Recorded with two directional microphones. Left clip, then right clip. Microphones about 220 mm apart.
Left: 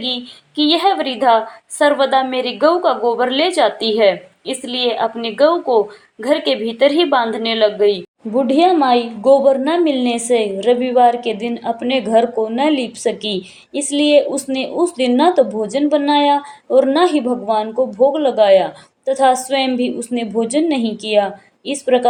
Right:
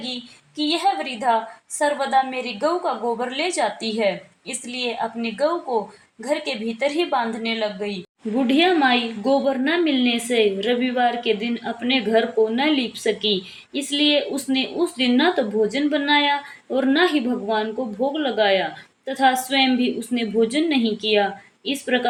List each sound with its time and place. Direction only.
0.5 s a woman's voice: 10° left (ahead or behind)